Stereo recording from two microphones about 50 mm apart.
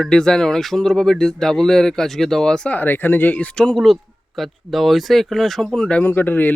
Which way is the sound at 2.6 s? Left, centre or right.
Left.